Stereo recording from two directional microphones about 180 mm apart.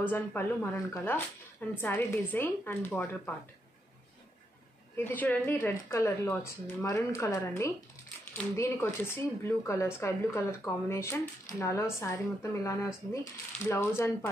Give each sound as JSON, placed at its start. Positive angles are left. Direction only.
{"t": 0.1, "sound": "speech", "side_deg": 10}
{"t": 4.9, "sound": "speech", "side_deg": 10}